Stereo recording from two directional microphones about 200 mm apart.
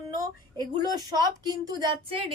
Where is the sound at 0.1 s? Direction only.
20° right (ahead or behind).